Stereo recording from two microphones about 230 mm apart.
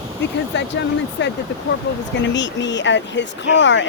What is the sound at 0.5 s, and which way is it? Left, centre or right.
Speech, left.